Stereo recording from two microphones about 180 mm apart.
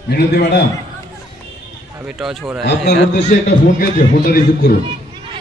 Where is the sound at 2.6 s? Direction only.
65° left (ahead or behind).